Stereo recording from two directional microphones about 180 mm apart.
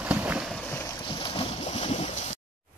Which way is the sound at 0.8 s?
25° left (ahead or behind).